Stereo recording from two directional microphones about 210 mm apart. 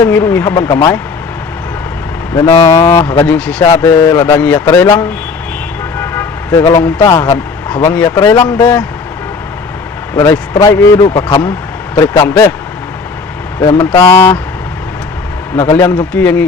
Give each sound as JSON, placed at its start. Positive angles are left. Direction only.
{"t": 0.1, "sound": "speech", "side_deg": 10}
{"t": 2.3, "sound": "a man's voice", "side_deg": 15}
{"t": 8.0, "sound": "speech", "side_deg": 20}
{"t": 10.2, "sound": "speech", "side_deg": 10}
{"t": 13.7, "sound": "speech", "side_deg": 15}
{"t": 15.5, "sound": "speech", "side_deg": 15}